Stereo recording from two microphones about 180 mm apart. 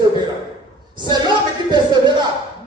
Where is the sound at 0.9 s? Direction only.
25° right (ahead or behind).